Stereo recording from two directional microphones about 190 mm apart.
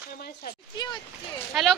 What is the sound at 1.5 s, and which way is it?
Speech, centre (ahead or behind).